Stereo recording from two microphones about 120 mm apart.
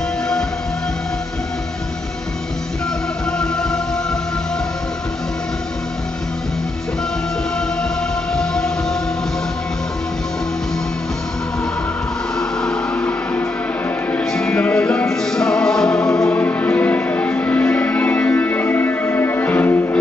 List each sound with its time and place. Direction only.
3.3 s music: 5° left (ahead or behind)
8.3 s music: 5° left (ahead or behind)
12.4 s music: 5° left (ahead or behind)